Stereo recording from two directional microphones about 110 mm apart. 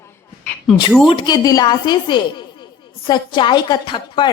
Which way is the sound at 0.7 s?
Centre (ahead or behind).